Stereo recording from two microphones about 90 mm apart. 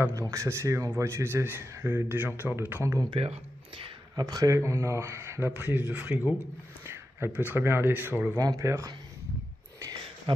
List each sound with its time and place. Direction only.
0.3 s a man's voice: 35° right (ahead or behind)
3.2 s speech: 85° right
4.2 s speech: 45° right (ahead or behind)
5.5 s a man's voice: 20° right (ahead or behind)
8.4 s speech: 40° right (ahead or behind)
10.3 s speech: 70° right (ahead or behind)